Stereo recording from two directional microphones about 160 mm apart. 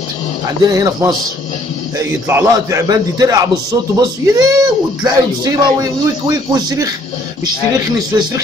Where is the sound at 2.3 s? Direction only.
20° right (ahead or behind).